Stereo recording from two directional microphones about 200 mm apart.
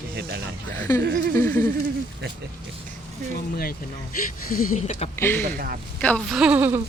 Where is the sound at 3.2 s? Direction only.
40° right (ahead or behind).